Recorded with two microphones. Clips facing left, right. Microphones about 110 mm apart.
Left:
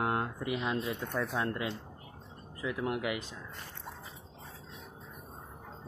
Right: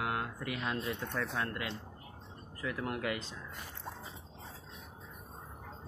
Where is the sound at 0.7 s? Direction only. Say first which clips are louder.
Left 3 dB; 15° left (ahead or behind).